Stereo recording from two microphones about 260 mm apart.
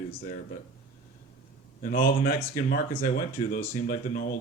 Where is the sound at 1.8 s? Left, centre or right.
Left.